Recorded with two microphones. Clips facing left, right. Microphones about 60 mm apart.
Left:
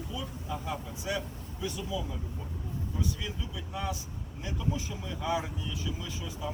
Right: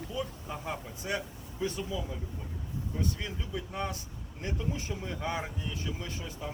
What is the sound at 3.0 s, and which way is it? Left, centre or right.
Speech, right.